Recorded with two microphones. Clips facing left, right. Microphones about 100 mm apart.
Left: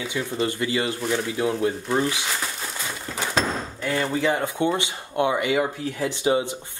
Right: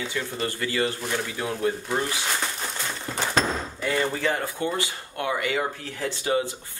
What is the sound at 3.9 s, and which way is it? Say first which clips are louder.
Speech: left 3 dB; 10° left (ahead or behind).